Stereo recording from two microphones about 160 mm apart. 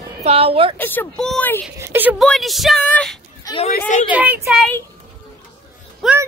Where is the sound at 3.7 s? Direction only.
50° left (ahead or behind).